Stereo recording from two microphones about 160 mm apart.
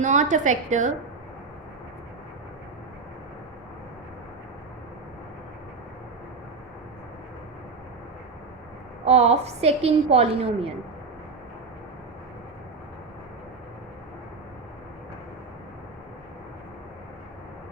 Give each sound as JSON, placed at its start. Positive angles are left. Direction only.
{"t": 0.0, "sound": "a woman's voice", "side_deg": -50}
{"t": 9.0, "sound": "a woman's voice", "side_deg": -40}